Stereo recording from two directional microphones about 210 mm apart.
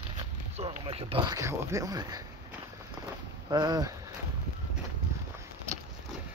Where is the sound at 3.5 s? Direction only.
20° right (ahead or behind).